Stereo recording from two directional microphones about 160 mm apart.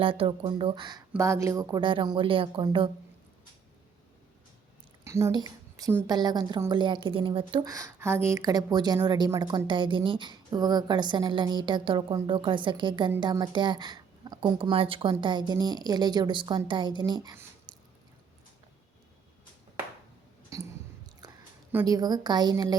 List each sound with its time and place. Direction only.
0.0 s speech: 35° right (ahead or behind)
1.1 s speech: 15° right (ahead or behind); by 2.9 s 35° right (ahead or behind)
5.0 s a woman's voice: 20° right (ahead or behind)
17.7 s ratchet: 25° right (ahead or behind)
20.5 s a sound: 20° right (ahead or behind)
21.2 s chewing: 25° right (ahead or behind)
21.8 s a woman's voice: 25° right (ahead or behind)